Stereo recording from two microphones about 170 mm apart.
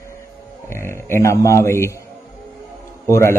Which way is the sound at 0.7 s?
15° left (ahead or behind).